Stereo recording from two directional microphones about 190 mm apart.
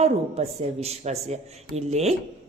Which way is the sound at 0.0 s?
35° right (ahead or behind).